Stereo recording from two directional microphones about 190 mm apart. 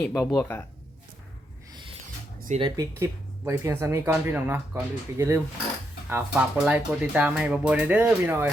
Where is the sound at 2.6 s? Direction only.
15° right (ahead or behind).